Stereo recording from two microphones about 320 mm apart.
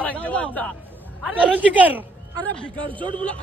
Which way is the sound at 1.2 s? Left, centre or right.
Centre.